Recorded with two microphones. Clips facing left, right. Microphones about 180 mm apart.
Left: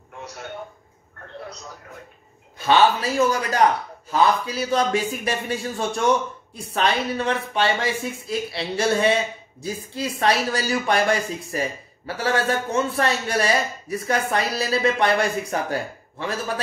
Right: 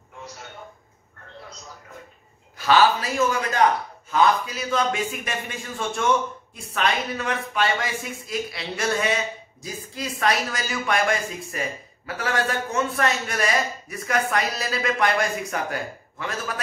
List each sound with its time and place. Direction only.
2.6 s a man's voice: 25° left (ahead or behind)